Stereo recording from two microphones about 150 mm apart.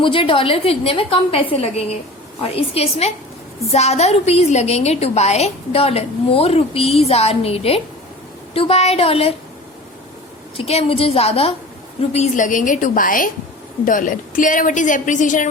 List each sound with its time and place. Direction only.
0.0 s a woman's voice: 35° left (ahead or behind)
10.6 s a woman's voice: 40° left (ahead or behind); by 15.4 s 55° left (ahead or behind)